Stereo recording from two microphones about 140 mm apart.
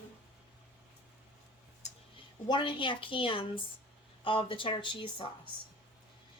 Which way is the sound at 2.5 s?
35° left (ahead or behind).